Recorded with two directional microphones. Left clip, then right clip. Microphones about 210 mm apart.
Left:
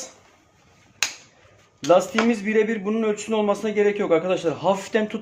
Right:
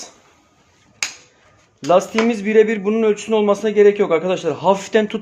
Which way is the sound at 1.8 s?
30° right (ahead or behind).